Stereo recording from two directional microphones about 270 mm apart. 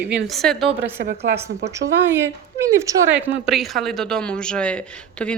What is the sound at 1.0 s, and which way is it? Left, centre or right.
Speech, right.